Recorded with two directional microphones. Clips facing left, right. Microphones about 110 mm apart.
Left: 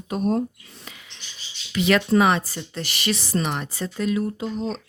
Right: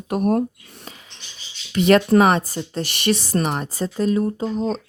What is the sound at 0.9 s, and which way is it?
Bird, 40° right (ahead or behind).